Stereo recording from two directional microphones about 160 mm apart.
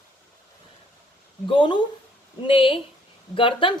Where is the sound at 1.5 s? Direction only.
30° left (ahead or behind).